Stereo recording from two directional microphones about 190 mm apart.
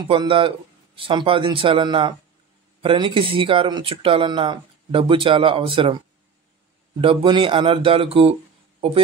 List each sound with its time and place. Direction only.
0.1 s speech: 25° right (ahead or behind)
7.0 s speech: 25° right (ahead or behind)